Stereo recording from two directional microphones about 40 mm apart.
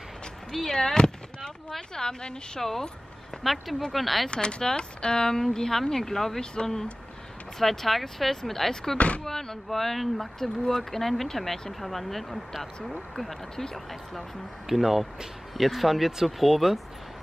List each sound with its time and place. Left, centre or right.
0.5 s speech: centre
0.7 s speech: centre
2.6 s speech: centre
4.3 s speech: left; by 8.9 s centre
8.9 s speech: left
9.2 s speech: centre
14.7 s speech: centre